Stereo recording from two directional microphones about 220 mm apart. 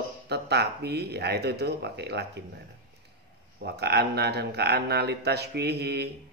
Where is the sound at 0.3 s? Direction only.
50° right (ahead or behind).